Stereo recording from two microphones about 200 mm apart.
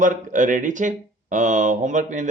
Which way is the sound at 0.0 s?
40° right (ahead or behind).